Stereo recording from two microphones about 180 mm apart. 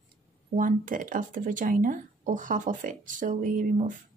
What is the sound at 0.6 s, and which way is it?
Speech, 50° right (ahead or behind).